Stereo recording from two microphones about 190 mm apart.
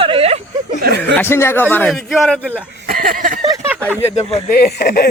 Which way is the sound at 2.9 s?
50° right (ahead or behind).